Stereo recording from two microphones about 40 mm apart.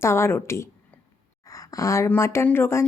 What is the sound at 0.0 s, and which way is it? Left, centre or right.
Speech, left.